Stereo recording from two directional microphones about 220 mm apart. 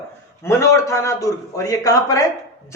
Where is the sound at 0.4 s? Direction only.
15° left (ahead or behind).